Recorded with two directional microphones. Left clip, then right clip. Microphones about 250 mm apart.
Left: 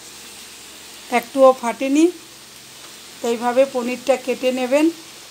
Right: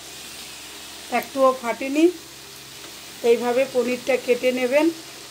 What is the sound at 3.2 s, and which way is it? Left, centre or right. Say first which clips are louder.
Speech: left 2 dB; left.